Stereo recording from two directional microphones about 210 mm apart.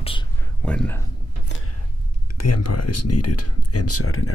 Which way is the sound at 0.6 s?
5° left (ahead or behind).